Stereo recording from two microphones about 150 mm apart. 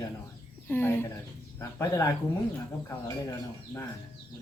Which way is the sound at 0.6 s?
15° left (ahead or behind).